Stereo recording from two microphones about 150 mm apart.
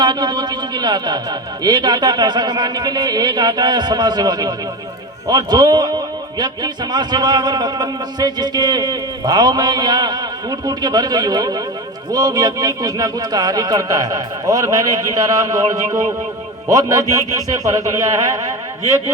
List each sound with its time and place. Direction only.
0.0 s a man's voice: 30° right (ahead or behind)